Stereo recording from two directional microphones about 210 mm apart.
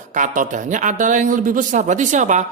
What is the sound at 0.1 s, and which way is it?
Speech, 40° right (ahead or behind).